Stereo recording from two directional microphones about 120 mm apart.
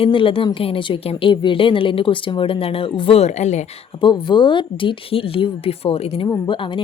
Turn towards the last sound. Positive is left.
turn(degrees=45)  # may be behind; listen again after turning